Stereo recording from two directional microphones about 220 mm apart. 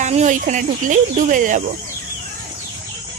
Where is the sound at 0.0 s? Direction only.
30° right (ahead or behind).